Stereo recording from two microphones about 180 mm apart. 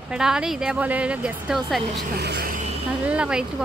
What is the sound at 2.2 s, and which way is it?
Speech, 65° right (ahead or behind).